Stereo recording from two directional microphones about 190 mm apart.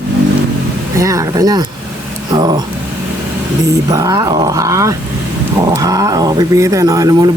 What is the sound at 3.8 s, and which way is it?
Speech, 20° right (ahead or behind).